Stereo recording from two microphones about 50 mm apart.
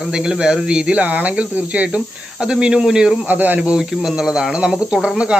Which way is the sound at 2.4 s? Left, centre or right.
Centre.